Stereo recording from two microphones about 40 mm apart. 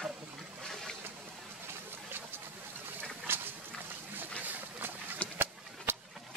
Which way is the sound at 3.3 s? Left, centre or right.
Right.